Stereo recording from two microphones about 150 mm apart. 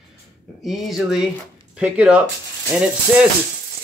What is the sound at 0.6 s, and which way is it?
Speech, centre (ahead or behind).